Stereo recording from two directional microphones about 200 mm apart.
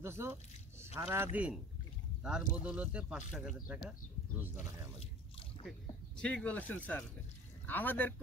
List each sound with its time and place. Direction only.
0.0 s speech: 10° right (ahead or behind)
4.6 s a sound: 30° left (ahead or behind)
5.7 s speech: 5° left (ahead or behind)